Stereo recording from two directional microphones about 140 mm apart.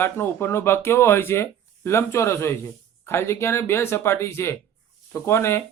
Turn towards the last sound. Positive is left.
turn(degrees=20)  # may be behind; listen again after turning